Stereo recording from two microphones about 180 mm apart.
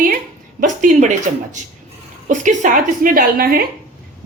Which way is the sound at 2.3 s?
45° right (ahead or behind).